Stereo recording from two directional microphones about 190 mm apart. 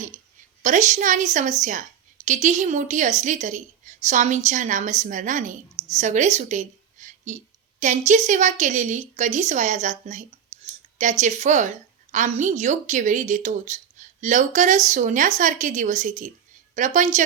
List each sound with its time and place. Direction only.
0.6 s a woman's voice: 40° right (ahead or behind)